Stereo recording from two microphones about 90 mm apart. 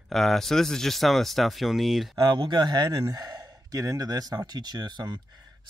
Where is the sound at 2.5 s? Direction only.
50° right (ahead or behind).